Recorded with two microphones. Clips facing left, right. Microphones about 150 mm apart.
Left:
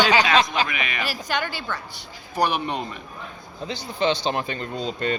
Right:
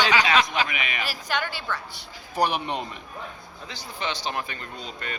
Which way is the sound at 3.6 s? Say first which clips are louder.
Left 9 dB; 25° left (ahead or behind).